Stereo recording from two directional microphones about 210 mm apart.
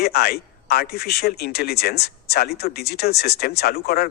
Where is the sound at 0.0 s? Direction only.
50° left (ahead or behind).